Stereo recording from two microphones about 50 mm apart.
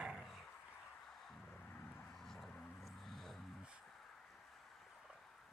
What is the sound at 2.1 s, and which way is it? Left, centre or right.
Dog, centre.